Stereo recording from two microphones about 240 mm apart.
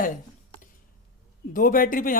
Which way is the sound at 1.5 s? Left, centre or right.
Left.